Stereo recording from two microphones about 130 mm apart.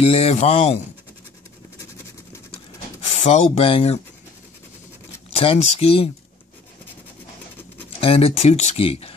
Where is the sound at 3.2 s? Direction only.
55° left (ahead or behind).